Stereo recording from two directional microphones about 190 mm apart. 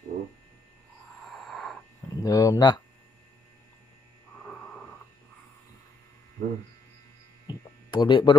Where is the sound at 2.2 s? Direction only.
20° left (ahead or behind).